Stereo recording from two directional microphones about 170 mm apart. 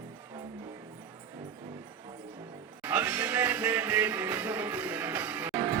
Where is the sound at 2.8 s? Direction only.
10° right (ahead or behind).